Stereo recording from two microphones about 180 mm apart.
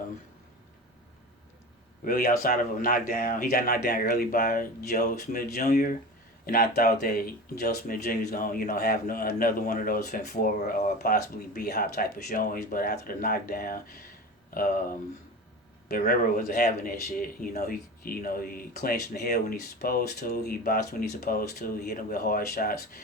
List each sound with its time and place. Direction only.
2.0 s speech: 55° left (ahead or behind)